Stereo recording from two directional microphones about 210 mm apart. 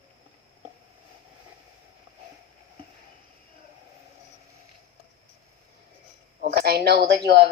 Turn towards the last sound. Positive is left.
turn(degrees=-50)  # may be behind; listen again after turning